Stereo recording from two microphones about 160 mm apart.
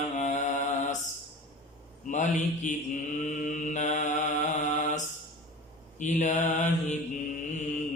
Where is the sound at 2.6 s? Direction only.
50° left (ahead or behind).